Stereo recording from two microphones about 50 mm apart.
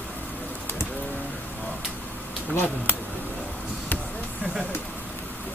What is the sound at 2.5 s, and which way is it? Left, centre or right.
Speech, left.